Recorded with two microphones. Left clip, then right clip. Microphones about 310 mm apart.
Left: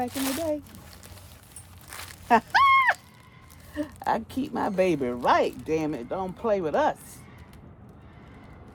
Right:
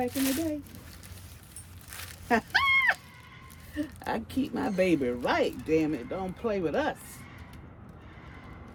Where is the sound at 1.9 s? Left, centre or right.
Left.